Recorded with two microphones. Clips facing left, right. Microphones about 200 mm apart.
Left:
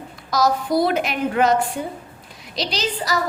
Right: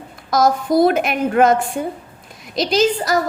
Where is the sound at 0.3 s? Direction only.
50° right (ahead or behind).